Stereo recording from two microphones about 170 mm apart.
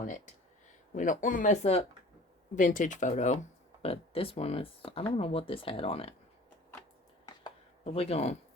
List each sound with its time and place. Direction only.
0.9 s speech: 50° left (ahead or behind)
7.9 s speech: 40° left (ahead or behind)